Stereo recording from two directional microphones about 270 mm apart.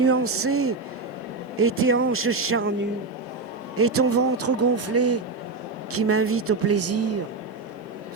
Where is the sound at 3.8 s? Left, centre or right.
Right.